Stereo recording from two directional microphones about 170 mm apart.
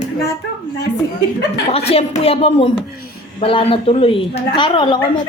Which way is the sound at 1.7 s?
35° left (ahead or behind).